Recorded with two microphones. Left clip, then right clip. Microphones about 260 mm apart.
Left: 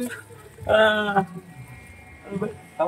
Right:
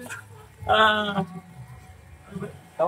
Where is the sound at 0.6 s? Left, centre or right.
Centre.